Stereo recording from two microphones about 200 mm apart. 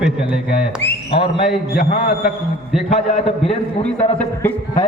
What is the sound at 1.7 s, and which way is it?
A man's voice, 40° left (ahead or behind).